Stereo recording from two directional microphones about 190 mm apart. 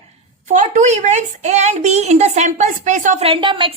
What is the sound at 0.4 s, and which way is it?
A woman's voice, 40° right (ahead or behind).